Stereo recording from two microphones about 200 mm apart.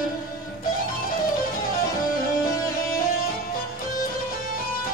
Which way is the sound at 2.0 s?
45° left (ahead or behind).